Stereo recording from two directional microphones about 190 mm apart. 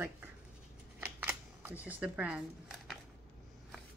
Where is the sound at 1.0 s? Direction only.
10° right (ahead or behind).